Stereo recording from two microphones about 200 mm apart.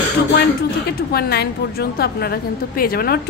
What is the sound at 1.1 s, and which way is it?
A woman's voice, 50° left (ahead or behind).